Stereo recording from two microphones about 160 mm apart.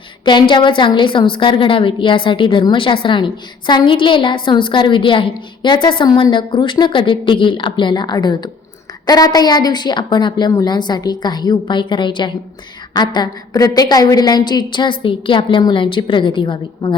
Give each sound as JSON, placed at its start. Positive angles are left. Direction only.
{"t": 0.3, "sound": "a woman's voice", "side_deg": 30}